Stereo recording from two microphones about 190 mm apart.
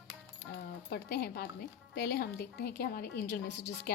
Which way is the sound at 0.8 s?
55° left (ahead or behind).